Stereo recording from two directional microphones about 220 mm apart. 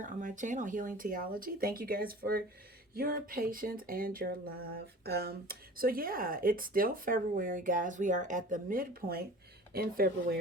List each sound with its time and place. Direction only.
0.0 s speech: 35° right (ahead or behind)